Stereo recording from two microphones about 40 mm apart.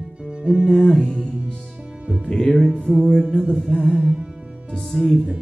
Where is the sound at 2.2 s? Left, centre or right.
Centre.